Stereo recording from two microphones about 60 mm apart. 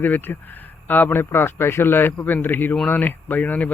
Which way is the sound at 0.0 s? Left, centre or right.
Left.